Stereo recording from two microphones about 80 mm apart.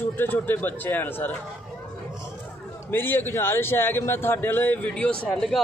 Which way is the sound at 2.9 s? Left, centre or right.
Left.